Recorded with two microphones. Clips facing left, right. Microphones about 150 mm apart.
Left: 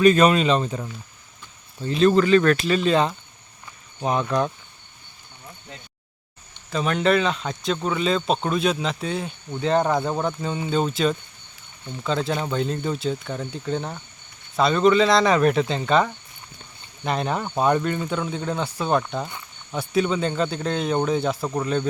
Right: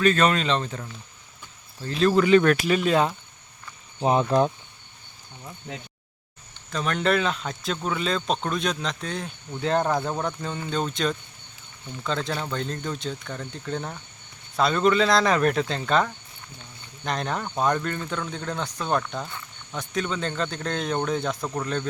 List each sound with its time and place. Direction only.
0.0 s speech: 10° left (ahead or behind)
1.9 s speech: centre (ahead or behind)
2.2 s speech: 10° right (ahead or behind)
4.0 s speech: 30° right (ahead or behind)
6.7 s speech: 5° left (ahead or behind)